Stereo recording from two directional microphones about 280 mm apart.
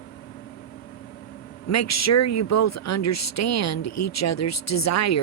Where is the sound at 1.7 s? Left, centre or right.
Left.